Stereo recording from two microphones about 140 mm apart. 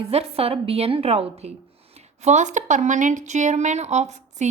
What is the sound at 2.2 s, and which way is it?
A woman's voice, 60° right (ahead or behind).